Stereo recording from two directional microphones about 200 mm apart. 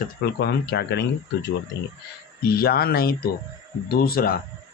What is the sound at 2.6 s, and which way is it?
Speech, 50° left (ahead or behind).